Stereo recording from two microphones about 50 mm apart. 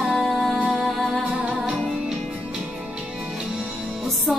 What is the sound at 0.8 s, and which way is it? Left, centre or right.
Music, centre.